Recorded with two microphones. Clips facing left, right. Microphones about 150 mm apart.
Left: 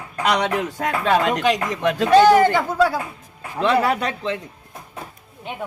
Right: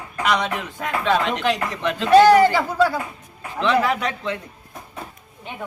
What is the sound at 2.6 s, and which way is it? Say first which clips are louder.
Speech: left 1 dB; centre (ahead or behind).